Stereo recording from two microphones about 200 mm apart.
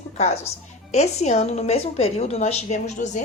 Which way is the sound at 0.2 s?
35° left (ahead or behind).